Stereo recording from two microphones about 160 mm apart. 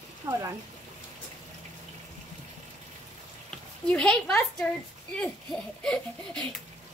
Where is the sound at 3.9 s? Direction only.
5° left (ahead or behind).